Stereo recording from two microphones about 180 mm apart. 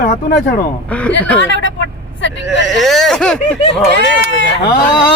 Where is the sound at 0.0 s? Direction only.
70° left (ahead or behind).